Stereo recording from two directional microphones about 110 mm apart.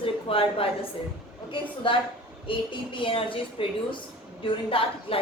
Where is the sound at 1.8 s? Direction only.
50° left (ahead or behind).